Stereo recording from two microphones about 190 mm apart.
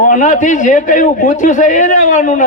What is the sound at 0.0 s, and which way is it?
A man's voice, 45° left (ahead or behind).